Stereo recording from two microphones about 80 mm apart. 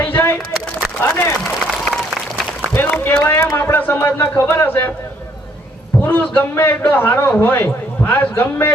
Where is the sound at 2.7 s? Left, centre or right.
Left.